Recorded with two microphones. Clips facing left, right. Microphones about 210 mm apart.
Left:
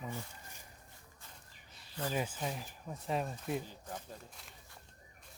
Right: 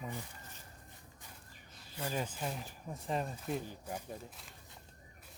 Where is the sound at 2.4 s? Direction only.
5° left (ahead or behind).